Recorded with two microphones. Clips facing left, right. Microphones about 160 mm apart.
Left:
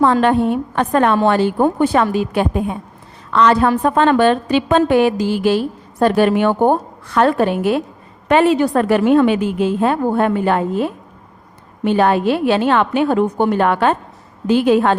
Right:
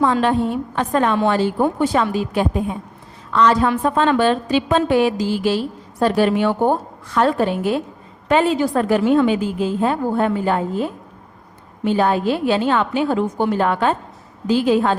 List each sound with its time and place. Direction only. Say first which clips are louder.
0.0 s a woman's voice: left 3 dB; 60° left (ahead or behind)